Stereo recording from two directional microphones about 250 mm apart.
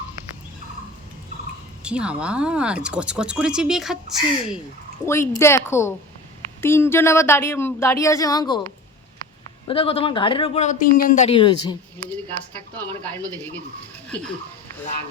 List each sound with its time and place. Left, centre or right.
1.8 s speech: centre
5.0 s a woman's voice: centre
9.6 s a man's voice: left